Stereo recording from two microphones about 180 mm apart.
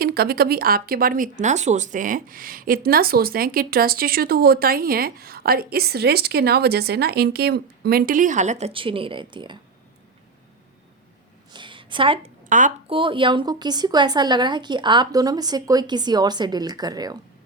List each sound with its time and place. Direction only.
0.0 s speech: 60° right (ahead or behind); by 9.6 s 25° right (ahead or behind)
11.5 s a sound: 25° right (ahead or behind)
12.5 s speech: 45° right (ahead or behind)
12.9 s a woman's voice: 30° right (ahead or behind)